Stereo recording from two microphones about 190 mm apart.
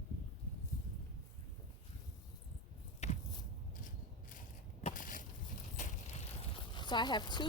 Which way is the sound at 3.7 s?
45° left (ahead or behind).